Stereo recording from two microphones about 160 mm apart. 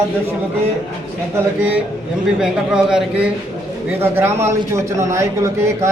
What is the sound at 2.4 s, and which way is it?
A man's voice, 5° right (ahead or behind).